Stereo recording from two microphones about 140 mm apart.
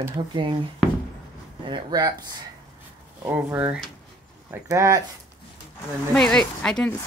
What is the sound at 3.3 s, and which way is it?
Speech, 10° right (ahead or behind).